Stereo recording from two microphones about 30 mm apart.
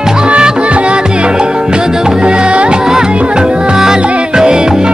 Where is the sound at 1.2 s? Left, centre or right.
Right.